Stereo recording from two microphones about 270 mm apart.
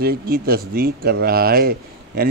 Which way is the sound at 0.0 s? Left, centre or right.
Right.